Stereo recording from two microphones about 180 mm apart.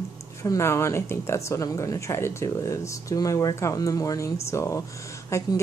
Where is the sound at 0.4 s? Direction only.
15° left (ahead or behind).